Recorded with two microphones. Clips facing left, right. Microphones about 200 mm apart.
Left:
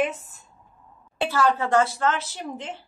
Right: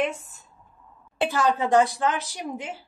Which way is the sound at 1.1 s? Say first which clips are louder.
Left 1 dB; 15° right (ahead or behind).